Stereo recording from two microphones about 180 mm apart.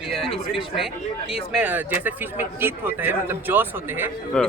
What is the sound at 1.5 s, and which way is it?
Speech, 5° right (ahead or behind).